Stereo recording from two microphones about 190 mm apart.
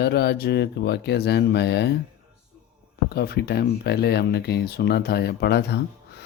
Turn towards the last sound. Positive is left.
turn(degrees=60)  # may be behind; listen again after turning